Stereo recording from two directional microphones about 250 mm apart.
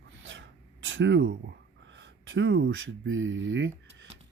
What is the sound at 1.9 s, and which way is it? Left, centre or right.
Speech, right.